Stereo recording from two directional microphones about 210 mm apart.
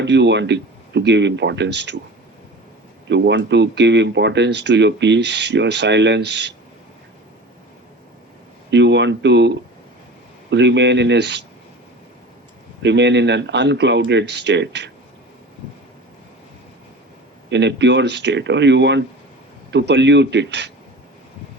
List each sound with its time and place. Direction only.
0.0 s speech: 55° right (ahead or behind)
3.1 s speech: 55° right (ahead or behind)
8.7 s speech: 55° right (ahead or behind)
12.8 s speech: 55° right (ahead or behind)
17.5 s speech: 55° right (ahead or behind)